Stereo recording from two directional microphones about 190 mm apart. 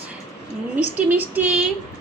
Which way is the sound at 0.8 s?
10° right (ahead or behind).